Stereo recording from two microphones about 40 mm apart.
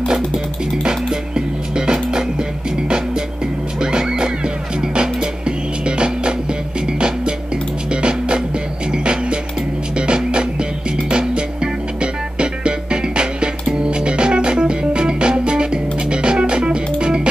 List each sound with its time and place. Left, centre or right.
0.8 s music: centre
3.8 s music: right
7.9 s music: right